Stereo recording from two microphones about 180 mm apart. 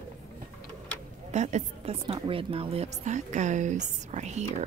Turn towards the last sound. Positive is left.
turn(degrees=-40)  # may be behind; listen again after turning